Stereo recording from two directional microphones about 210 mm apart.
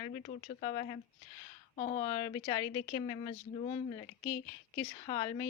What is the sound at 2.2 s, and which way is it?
Speech, 20° left (ahead or behind).